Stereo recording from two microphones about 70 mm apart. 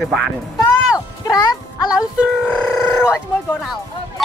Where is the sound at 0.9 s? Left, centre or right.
Left.